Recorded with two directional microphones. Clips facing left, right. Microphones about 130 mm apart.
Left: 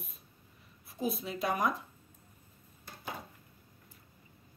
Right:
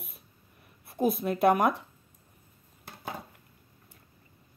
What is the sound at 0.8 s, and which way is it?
Speech, 55° right (ahead or behind).